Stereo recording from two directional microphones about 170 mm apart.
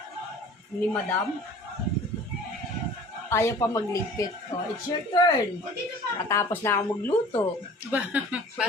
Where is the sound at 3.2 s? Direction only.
15° left (ahead or behind).